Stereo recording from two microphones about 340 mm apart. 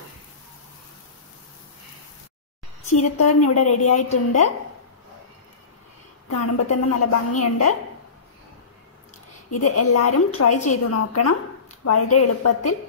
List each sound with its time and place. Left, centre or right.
3.0 s a woman's voice: left
6.4 s a woman's voice: left
9.5 s a woman's voice: left